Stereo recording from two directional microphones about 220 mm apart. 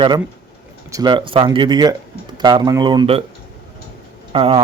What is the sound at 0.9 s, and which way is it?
Speech, 15° right (ahead or behind).